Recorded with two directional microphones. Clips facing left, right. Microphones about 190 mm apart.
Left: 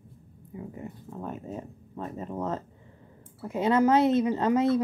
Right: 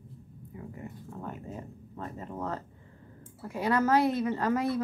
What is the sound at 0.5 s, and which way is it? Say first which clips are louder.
Speech: left 4 dB; 20° left (ahead or behind).